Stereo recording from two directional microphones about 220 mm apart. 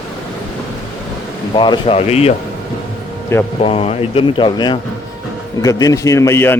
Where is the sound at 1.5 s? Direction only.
20° left (ahead or behind).